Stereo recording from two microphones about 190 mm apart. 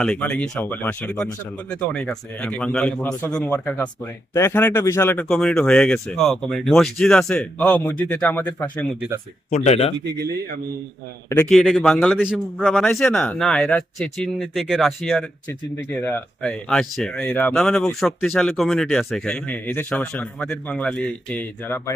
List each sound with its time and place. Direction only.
0.0 s speech: 5° left (ahead or behind)
9.5 s speech: 35° left (ahead or behind)
10.0 s speech: 60° right (ahead or behind)
11.3 s a man's voice: 5° left (ahead or behind)